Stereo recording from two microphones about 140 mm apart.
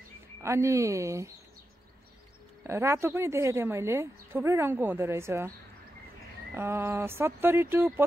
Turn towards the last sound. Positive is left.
turn(degrees=-15)  # may be behind; listen again after turning